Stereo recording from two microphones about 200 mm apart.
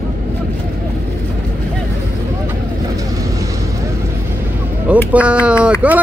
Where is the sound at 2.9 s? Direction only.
15° right (ahead or behind).